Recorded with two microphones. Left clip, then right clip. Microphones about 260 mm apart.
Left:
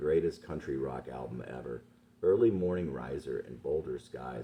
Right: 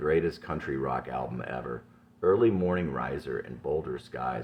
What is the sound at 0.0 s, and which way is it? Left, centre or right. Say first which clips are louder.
Speech: right 3 dB; right.